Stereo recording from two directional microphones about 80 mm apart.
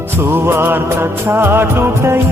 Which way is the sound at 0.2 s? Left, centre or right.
Right.